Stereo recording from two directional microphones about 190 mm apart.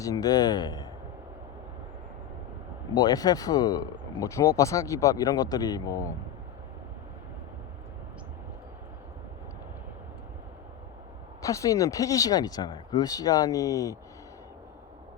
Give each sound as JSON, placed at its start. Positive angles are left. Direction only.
{"t": 0.0, "sound": "speech", "side_deg": 20}
{"t": 2.9, "sound": "speech", "side_deg": 20}
{"t": 11.4, "sound": "speech", "side_deg": 15}